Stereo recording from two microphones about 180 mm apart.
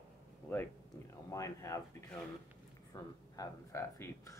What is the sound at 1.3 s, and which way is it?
Speech, 20° left (ahead or behind).